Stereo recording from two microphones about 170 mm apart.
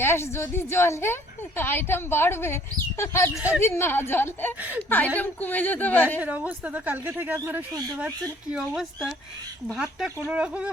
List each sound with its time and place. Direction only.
0.0 s a woman's voice: 15° left (ahead or behind)
3.3 s a woman's voice: 5° right (ahead or behind)
3.6 s a woman's voice: 15° left (ahead or behind)
6.1 s a woman's voice: 10° right (ahead or behind)